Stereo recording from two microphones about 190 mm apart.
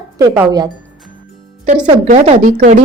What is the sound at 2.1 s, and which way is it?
Speech, 40° right (ahead or behind).